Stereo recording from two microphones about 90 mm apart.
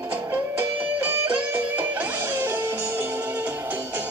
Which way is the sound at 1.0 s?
25° right (ahead or behind).